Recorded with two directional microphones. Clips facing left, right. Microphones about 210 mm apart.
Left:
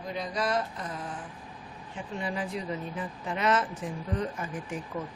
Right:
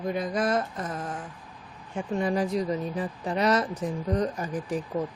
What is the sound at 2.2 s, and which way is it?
A woman's voice, 40° right (ahead or behind).